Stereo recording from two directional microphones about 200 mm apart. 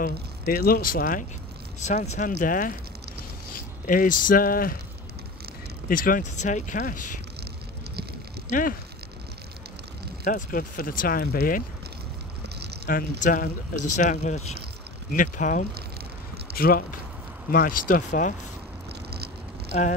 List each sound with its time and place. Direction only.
0.0 s speech: 45° left (ahead or behind)
3.8 s speech: 40° left (ahead or behind)
5.9 s speech: 45° left (ahead or behind)
8.5 s speech: 40° left (ahead or behind)
10.2 s speech: 40° left (ahead or behind)
12.9 s speech: 45° left (ahead or behind)
18.9 s vehicle: 55° right (ahead or behind)
19.7 s speech: 35° left (ahead or behind)